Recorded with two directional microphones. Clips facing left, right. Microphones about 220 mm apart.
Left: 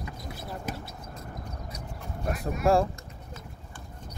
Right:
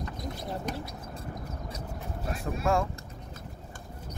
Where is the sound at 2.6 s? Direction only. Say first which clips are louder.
Left 5 dB; 35° left (ahead or behind).